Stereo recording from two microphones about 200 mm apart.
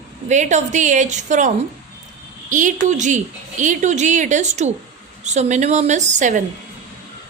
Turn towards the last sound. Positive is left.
turn(degrees=-40)  # may be behind; listen again after turning